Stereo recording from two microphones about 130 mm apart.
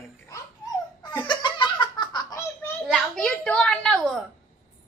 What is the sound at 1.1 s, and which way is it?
Laughter, 35° left (ahead or behind).